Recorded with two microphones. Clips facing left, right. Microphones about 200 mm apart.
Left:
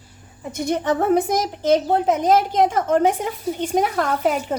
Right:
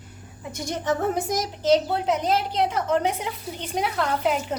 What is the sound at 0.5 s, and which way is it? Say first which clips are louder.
A woman's voice: left 5 dB; 60° left (ahead or behind).